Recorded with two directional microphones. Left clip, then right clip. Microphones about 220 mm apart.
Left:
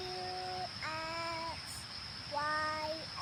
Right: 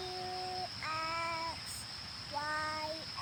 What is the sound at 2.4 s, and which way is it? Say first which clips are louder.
Child singing: left 2 dB; centre (ahead or behind).